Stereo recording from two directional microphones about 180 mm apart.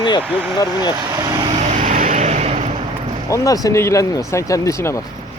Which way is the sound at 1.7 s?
45° right (ahead or behind).